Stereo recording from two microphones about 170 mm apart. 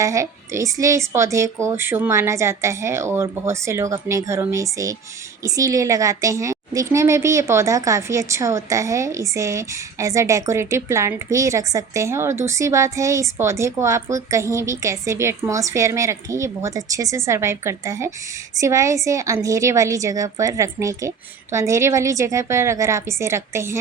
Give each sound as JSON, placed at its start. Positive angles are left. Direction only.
{"t": 0.0, "sound": "a woman's voice", "side_deg": -20}